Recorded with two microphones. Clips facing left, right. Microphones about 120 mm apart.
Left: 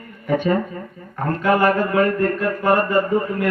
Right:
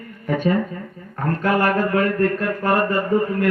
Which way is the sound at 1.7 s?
45° left (ahead or behind).